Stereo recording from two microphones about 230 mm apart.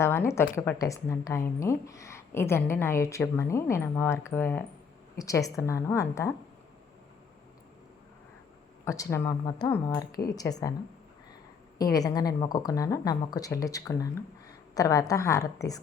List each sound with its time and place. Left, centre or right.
0.0 s a woman's voice: centre
8.8 s a woman's voice: centre
11.8 s a woman's voice: centre